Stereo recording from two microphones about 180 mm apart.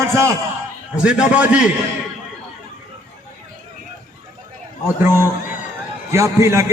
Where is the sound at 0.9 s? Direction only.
5° right (ahead or behind).